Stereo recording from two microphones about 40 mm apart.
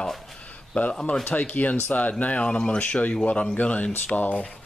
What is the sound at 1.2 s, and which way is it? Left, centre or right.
Speech, left.